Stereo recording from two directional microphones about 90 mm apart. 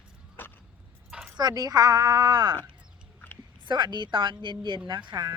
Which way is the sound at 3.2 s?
20° left (ahead or behind).